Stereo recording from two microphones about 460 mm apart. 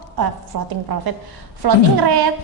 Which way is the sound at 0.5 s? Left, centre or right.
Right.